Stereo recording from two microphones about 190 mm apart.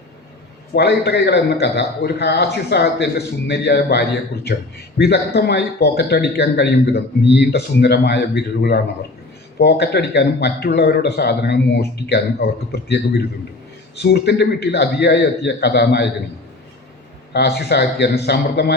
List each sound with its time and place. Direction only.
0.7 s a man's voice: 60° left (ahead or behind)
14.0 s a man's voice: 60° left (ahead or behind)
17.3 s a man's voice: 60° left (ahead or behind)